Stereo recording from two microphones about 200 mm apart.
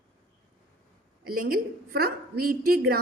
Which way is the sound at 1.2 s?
45° right (ahead or behind).